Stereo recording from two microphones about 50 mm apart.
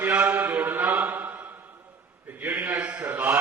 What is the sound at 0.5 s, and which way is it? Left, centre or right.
Chant, right.